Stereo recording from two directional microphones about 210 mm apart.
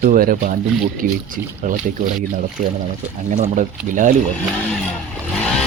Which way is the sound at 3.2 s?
30° right (ahead or behind).